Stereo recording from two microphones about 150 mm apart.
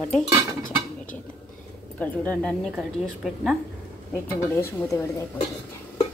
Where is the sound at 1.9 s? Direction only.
10° left (ahead or behind).